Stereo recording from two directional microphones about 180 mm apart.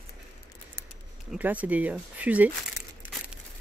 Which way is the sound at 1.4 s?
10° right (ahead or behind).